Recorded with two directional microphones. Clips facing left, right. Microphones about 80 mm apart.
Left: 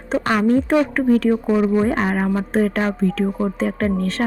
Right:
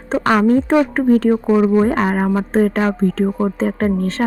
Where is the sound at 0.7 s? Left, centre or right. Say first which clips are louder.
Right 3 dB; right.